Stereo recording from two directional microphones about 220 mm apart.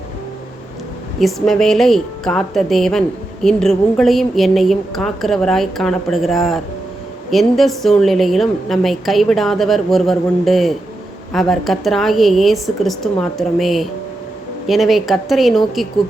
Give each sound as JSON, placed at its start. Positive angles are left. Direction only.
{"t": 1.2, "sound": "a woman's voice", "side_deg": 0}